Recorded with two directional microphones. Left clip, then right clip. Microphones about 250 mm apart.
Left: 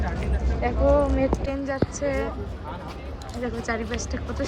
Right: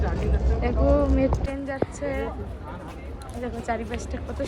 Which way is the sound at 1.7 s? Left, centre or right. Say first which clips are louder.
Left 2 dB; centre.